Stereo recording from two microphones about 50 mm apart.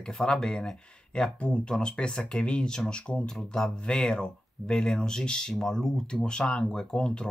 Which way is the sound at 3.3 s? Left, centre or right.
Centre.